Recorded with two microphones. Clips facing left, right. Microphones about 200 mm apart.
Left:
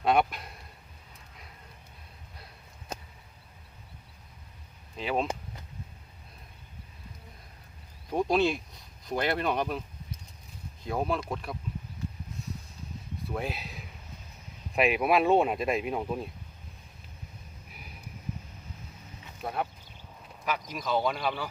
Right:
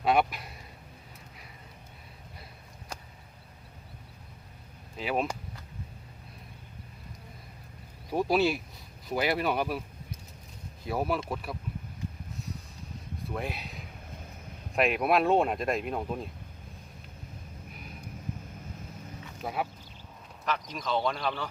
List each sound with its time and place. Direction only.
0.0 s speech: centre (ahead or behind)
2.9 s a sound: 20° left (ahead or behind)
4.9 s speech: 5° right (ahead or behind)
8.1 s speech: 5° right (ahead or behind)
10.8 s speech: 5° right (ahead or behind)
13.3 s speech: centre (ahead or behind)
19.4 s quack: centre (ahead or behind)
20.4 s speech: 10° left (ahead or behind)